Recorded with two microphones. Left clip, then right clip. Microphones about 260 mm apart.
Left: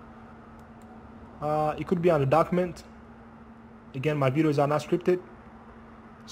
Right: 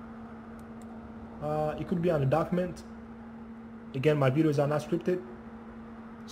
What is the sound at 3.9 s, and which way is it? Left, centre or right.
Speech, centre.